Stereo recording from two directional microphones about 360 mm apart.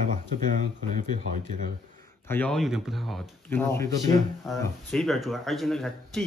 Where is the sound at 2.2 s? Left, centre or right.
Centre.